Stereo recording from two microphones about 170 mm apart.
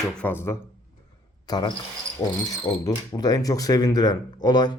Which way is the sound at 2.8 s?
20° left (ahead or behind).